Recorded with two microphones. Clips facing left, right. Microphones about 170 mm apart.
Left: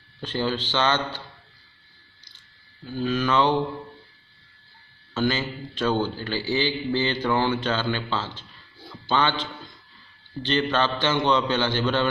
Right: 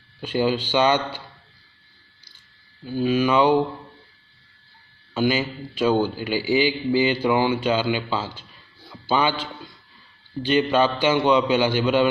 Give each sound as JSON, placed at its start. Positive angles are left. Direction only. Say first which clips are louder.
{"t": 0.2, "sound": "a man's voice", "louder": "right 5 dB", "side_deg": -10}
{"t": 2.9, "sound": "a man's voice", "louder": "right 4 dB", "side_deg": -10}
{"t": 5.1, "sound": "a man's voice", "louder": "right 3 dB", "side_deg": -10}